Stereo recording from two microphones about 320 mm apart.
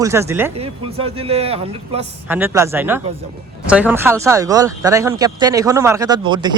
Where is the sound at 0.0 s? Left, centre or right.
Centre.